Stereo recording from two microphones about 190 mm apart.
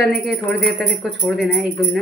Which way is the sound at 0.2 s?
Centre (ahead or behind).